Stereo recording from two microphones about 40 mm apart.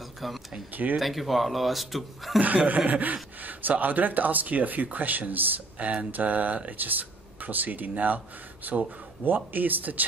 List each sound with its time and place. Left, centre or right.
0.2 s speech: centre
2.4 s chuckle: right
2.9 s speech: right